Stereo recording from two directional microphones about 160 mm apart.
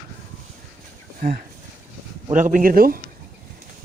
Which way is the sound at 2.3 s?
55° right (ahead or behind).